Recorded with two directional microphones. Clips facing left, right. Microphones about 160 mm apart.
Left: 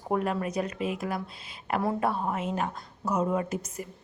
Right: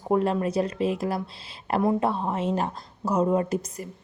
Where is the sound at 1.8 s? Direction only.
20° right (ahead or behind).